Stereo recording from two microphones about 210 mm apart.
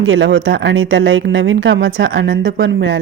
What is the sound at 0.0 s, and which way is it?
A woman's voice, 60° right (ahead or behind).